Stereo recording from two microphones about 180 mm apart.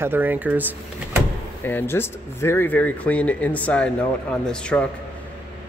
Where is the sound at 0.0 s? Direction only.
10° right (ahead or behind).